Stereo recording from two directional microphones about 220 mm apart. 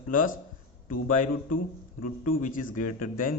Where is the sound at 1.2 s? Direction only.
90° left.